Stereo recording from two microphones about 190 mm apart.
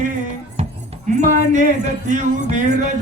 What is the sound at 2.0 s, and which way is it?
Music, 40° right (ahead or behind).